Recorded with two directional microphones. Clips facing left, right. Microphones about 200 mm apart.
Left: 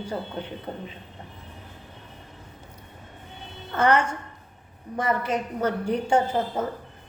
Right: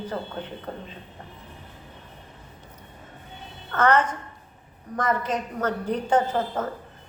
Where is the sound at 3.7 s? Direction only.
10° left (ahead or behind).